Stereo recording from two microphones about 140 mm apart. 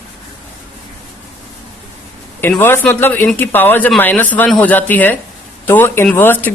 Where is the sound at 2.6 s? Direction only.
15° left (ahead or behind).